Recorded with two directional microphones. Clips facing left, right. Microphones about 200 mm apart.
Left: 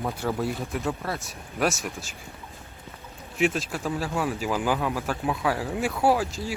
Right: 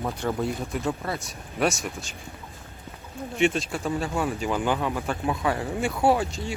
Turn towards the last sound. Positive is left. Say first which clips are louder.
# right 1 dB
turn(degrees=0)  # may be behind; listen again after turning